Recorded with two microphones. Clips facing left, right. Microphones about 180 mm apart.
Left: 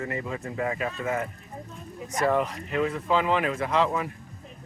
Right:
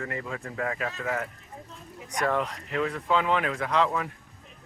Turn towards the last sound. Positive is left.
turn(degrees=5)  # may be behind; listen again after turning